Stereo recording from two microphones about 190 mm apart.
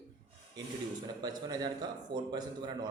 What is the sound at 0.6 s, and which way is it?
A man's voice, 20° right (ahead or behind).